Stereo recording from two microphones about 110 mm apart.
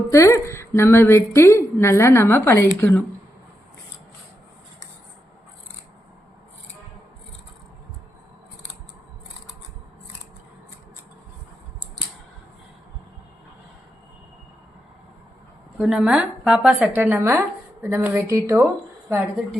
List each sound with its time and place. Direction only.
0.1 s a woman's voice: 25° left (ahead or behind)
15.8 s a woman's voice: 5° right (ahead or behind)
16.9 s speech: 20° right (ahead or behind)